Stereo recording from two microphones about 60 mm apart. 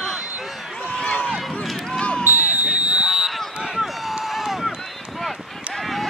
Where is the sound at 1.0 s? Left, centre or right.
Left.